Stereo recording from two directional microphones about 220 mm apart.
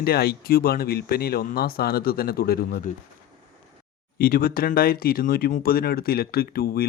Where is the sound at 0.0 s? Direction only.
45° left (ahead or behind).